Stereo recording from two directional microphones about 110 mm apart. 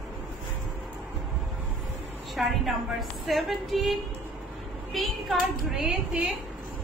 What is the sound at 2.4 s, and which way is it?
A woman's voice, centre (ahead or behind).